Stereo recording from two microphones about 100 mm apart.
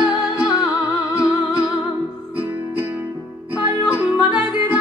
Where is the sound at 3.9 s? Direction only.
15° right (ahead or behind).